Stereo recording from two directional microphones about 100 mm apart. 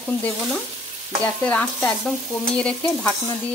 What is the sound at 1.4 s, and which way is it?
Stir, 10° left (ahead or behind).